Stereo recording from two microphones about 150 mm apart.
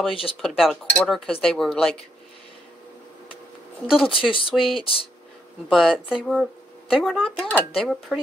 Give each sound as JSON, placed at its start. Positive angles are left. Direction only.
{"t": 0.1, "sound": "speech", "side_deg": 40}
{"t": 0.4, "sound": "speech", "side_deg": 0}
{"t": 4.1, "sound": "speech", "side_deg": 35}
{"t": 4.5, "sound": "speech", "side_deg": 0}
{"t": 4.7, "sound": "speech", "side_deg": 35}
{"t": 5.7, "sound": "speech", "side_deg": 0}